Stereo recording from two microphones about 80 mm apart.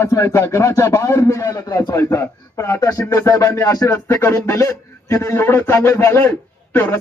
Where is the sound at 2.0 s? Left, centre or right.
Left.